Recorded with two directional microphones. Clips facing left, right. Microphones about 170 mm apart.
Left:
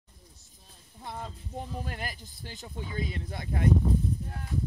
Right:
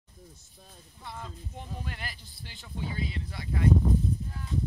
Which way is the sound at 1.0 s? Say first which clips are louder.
Left 3 dB; 35° left (ahead or behind).